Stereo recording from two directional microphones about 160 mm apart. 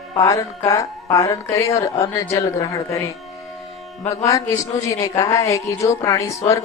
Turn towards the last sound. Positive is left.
turn(degrees=20)  # may be behind; listen again after turning